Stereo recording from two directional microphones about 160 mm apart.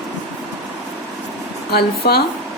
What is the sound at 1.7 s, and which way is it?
Speech, 80° left.